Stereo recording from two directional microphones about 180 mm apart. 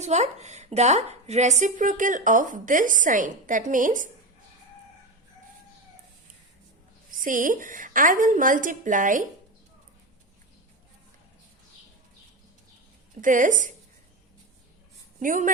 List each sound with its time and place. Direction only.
0.0 s speech: 40° right (ahead or behind)
7.1 s speech: 45° right (ahead or behind)
13.2 s speech: 45° right (ahead or behind)
15.2 s speech: 45° right (ahead or behind)